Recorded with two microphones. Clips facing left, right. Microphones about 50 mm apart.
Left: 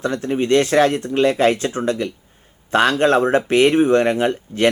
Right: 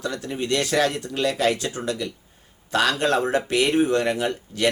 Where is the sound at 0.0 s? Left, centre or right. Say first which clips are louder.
Left 7 dB; left.